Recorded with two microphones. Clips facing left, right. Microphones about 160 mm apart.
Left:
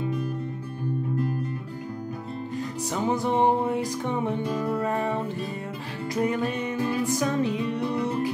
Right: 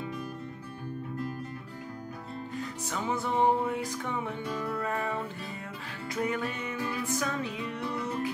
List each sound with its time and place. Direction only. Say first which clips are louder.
2.9 s music: left 6 dB; 35° left (ahead or behind)
7.8 s music: left 4 dB; 20° left (ahead or behind)